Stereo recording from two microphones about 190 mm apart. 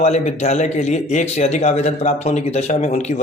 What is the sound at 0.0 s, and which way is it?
A man's voice, 35° left (ahead or behind).